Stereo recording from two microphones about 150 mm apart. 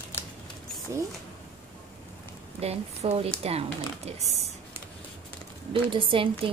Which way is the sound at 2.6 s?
40° right (ahead or behind).